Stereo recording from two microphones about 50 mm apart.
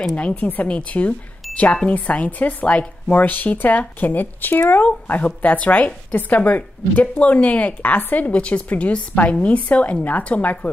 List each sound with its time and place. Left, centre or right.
0.4 s speech: left